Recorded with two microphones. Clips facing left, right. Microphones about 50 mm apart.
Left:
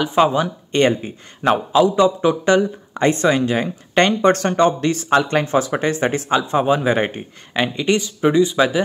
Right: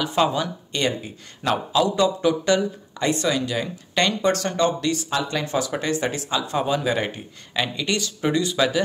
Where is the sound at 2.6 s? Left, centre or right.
Left.